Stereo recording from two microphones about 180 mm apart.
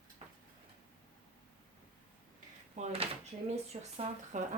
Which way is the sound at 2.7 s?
35° right (ahead or behind).